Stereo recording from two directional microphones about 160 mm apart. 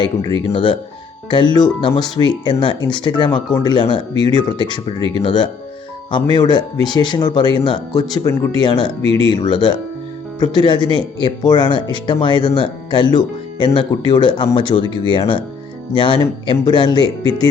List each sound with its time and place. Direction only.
0.2 s speech: 35° right (ahead or behind)
0.5 s speech: 30° left (ahead or behind)
16.5 s speech: 30° left (ahead or behind)